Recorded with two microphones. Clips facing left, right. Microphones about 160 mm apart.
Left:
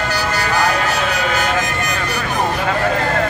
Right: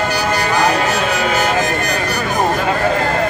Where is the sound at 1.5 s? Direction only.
35° right (ahead or behind).